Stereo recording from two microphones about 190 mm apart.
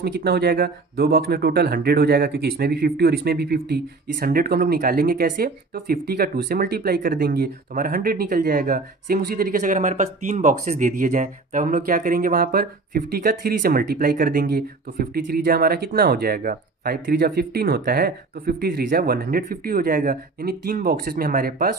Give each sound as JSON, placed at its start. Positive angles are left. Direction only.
{"t": 0.0, "sound": "speech", "side_deg": -55}